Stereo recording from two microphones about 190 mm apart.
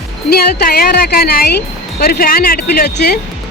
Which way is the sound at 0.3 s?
55° left (ahead or behind).